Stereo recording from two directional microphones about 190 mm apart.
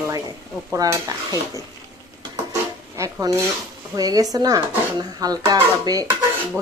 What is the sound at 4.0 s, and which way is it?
Speech, 20° right (ahead or behind).